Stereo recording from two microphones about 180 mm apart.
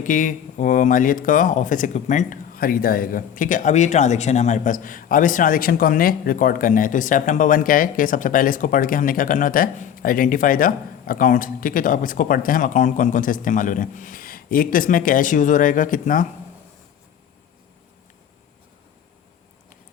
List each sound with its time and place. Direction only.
0.0 s speech: 45° left (ahead or behind)